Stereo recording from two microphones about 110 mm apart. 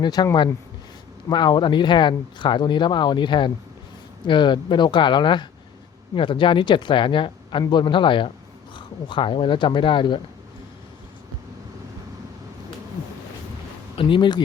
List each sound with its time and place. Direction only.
0.0 s speech: 40° left (ahead or behind)
1.3 s speech: 40° left (ahead or behind)
13.9 s speech: 50° left (ahead or behind)